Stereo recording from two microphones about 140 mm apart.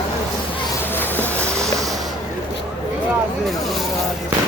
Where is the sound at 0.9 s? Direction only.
15° left (ahead or behind).